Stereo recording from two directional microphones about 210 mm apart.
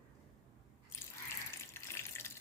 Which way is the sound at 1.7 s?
10° left (ahead or behind).